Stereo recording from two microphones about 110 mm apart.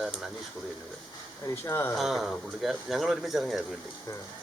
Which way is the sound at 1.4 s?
20° left (ahead or behind).